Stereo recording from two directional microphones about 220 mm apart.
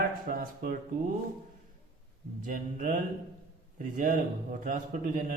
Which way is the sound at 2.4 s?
35° right (ahead or behind).